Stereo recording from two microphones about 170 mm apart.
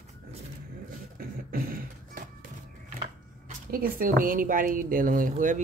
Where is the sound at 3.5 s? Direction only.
55° right (ahead or behind).